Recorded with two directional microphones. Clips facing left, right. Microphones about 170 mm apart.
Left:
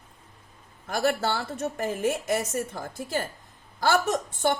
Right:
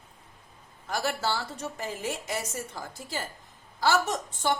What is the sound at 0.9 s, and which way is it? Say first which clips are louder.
A woman's voice: left 4 dB; 55° left (ahead or behind).